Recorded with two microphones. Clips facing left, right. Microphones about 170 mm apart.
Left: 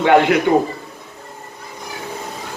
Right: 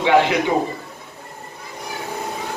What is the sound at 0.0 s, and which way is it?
Speech, 55° left (ahead or behind).